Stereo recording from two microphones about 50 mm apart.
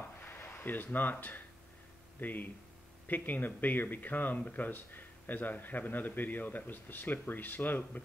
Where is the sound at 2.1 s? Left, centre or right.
Left.